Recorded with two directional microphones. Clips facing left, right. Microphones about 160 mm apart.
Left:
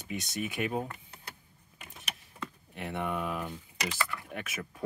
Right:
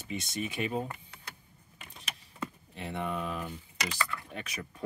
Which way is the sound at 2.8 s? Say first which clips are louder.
Left 1 dB; 10° left (ahead or behind).